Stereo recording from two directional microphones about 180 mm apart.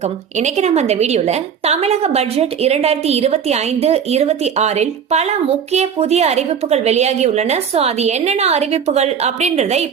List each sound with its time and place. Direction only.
0.3 s a woman's voice: 40° right (ahead or behind)